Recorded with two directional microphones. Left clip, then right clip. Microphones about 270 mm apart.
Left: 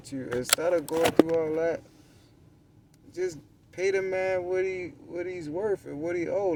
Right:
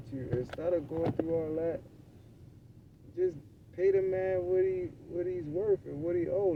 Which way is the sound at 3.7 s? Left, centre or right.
Left.